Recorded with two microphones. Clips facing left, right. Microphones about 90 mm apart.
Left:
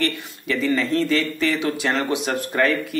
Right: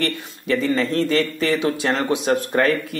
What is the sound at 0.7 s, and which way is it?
Speech, 35° right (ahead or behind).